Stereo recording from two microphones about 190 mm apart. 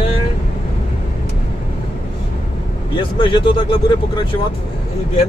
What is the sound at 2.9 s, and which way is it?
Speech, 25° left (ahead or behind).